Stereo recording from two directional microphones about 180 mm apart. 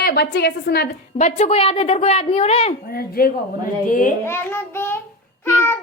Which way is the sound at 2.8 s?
55° left (ahead or behind).